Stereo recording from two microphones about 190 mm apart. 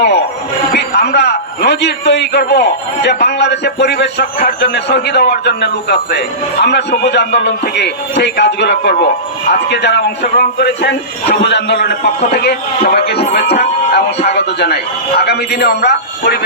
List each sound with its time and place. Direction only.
0.7 s a man's voice: 60° left (ahead or behind)